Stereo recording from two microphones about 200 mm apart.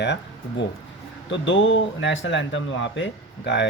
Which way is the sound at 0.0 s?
60° left (ahead or behind).